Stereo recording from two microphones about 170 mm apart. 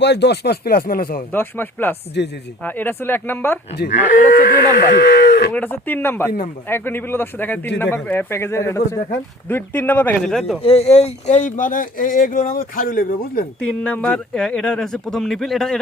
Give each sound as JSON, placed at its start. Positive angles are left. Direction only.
{"t": 0.0, "sound": "speech", "side_deg": 85}
{"t": 1.3, "sound": "speech", "side_deg": 10}
{"t": 4.4, "sound": "speech", "side_deg": 55}
{"t": 5.5, "sound": "speech", "side_deg": 10}
{"t": 10.6, "sound": "speech", "side_deg": 35}
{"t": 13.6, "sound": "speech", "side_deg": 5}